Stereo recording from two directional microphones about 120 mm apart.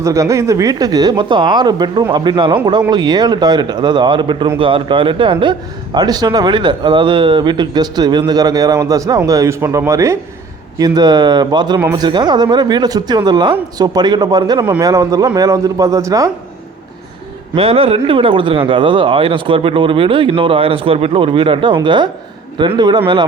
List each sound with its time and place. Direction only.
0.0 s a man's voice: 25° right (ahead or behind)
17.5 s a man's voice: 55° right (ahead or behind)